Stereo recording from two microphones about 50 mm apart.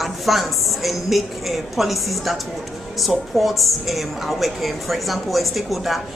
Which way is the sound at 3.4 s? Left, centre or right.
Centre.